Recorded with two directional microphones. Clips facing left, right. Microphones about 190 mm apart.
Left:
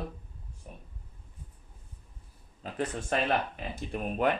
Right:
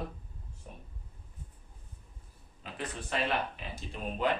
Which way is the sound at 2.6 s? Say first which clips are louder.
Left 5 dB; 40° left (ahead or behind).